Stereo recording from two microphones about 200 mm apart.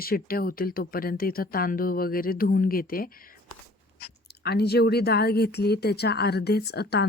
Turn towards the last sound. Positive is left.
turn(degrees=55)  # may be behind; listen again after turning